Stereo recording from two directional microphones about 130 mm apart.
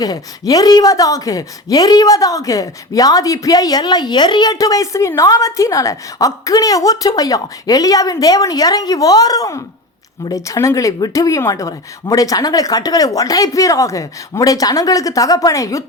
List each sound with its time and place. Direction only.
0.0 s a woman's voice: 30° left (ahead or behind)